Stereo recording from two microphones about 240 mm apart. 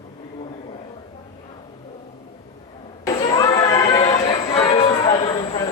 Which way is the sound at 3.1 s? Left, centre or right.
Left.